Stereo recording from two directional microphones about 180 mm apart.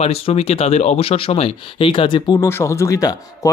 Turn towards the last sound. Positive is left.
turn(degrees=20)  # may be behind; listen again after turning